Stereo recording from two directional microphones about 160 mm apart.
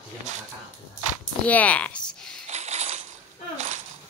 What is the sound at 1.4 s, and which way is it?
Speech, 10° left (ahead or behind).